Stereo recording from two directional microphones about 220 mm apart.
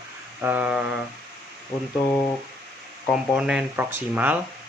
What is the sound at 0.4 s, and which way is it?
Speech, 5° right (ahead or behind).